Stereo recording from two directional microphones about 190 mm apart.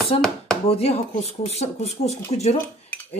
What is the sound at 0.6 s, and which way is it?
Speech, 30° left (ahead or behind).